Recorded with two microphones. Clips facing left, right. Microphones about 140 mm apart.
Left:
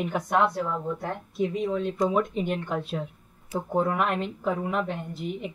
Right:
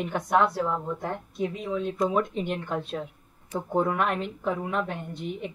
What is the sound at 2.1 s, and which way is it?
Speech, 5° left (ahead or behind).